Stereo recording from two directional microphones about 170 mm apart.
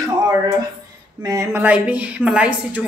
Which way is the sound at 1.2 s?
20° right (ahead or behind).